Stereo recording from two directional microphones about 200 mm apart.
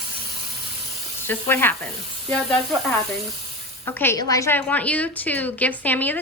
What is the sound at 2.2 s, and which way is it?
Sizzle, 5° left (ahead or behind).